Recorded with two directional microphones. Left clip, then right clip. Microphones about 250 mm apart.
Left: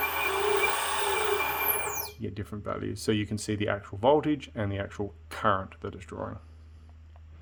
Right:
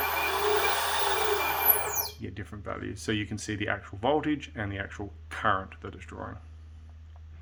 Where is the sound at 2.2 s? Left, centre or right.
Left.